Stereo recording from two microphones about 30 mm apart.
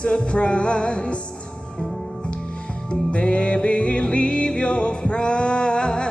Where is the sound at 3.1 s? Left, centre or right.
Left.